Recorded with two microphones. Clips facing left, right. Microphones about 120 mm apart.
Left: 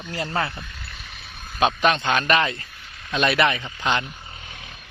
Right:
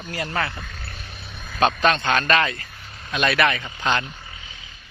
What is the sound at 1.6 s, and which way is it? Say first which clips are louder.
A man's voice: right 1 dB; 10° left (ahead or behind).